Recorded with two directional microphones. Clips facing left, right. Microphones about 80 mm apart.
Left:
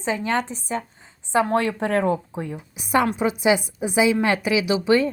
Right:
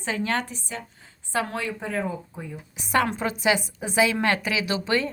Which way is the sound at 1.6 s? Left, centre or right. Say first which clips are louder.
Left 7 dB; left.